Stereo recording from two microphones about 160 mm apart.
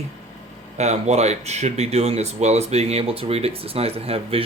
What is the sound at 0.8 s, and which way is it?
Speech, 45° right (ahead or behind).